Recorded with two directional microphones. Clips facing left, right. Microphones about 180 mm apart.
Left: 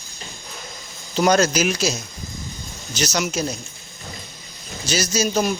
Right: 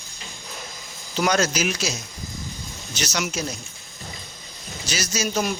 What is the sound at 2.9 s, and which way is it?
Speech, 40° left (ahead or behind).